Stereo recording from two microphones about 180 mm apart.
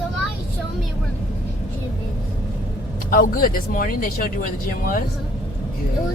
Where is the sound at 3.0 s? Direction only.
50° left (ahead or behind).